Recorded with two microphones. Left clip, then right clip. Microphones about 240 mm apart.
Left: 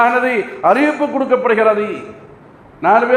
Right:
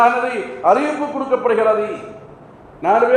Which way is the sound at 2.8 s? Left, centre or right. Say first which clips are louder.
Left 3 dB; left.